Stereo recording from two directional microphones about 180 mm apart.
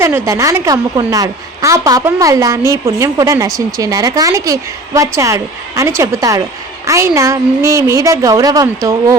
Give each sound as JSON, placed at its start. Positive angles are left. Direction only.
{"t": 0.0, "sound": "a woman's voice", "side_deg": -15}